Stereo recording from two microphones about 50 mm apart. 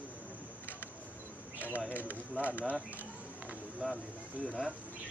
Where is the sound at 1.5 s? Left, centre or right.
Left.